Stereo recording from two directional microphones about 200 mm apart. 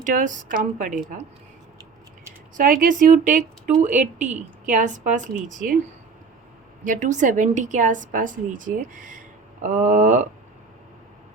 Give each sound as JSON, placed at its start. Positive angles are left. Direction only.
{"t": 0.0, "sound": "a woman's voice", "side_deg": -40}
{"t": 2.6, "sound": "a woman's voice", "side_deg": -40}
{"t": 6.8, "sound": "a woman's voice", "side_deg": -40}